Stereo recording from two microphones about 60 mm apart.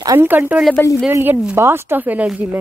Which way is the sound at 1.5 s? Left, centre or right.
Right.